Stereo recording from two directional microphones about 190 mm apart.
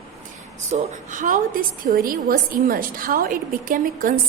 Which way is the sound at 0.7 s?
40° right (ahead or behind).